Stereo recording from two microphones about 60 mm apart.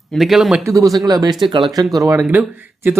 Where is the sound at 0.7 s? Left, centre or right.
Right.